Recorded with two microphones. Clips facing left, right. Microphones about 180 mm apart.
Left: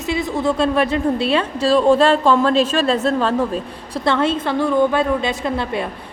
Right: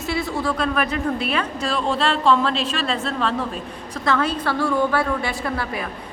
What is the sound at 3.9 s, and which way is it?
A man's voice, 30° left (ahead or behind).